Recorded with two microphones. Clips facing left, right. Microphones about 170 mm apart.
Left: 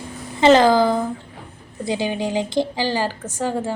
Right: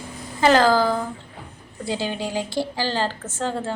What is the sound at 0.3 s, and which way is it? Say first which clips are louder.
A woman's voice: left 4 dB; 20° left (ahead or behind).